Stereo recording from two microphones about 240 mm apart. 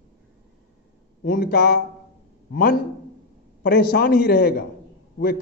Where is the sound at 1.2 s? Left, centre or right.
Left.